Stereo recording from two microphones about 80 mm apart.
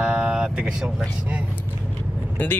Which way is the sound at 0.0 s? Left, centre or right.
Centre.